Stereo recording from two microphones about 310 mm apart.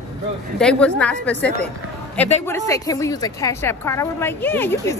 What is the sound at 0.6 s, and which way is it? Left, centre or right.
A woman's voice, centre.